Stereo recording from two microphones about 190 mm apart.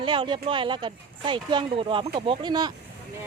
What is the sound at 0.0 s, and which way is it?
Speech, 25° right (ahead or behind).